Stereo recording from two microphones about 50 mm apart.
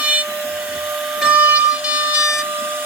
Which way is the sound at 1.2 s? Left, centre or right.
Right.